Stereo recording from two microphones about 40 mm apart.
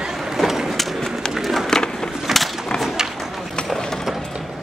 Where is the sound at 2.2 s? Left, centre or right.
Centre.